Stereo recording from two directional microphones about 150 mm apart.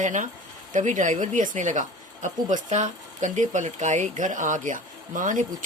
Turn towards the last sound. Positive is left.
turn(degrees=-60)  # may be behind; listen again after turning